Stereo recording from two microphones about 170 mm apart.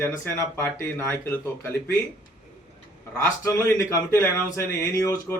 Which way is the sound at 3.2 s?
15° left (ahead or behind).